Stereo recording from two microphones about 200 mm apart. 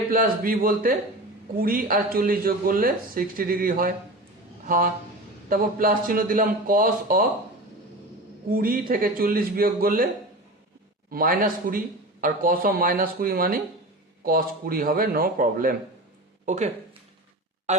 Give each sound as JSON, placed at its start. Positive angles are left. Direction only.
{"t": 0.1, "sound": "speech", "side_deg": -45}
{"t": 8.4, "sound": "speech", "side_deg": -45}
{"t": 11.1, "sound": "speech", "side_deg": -45}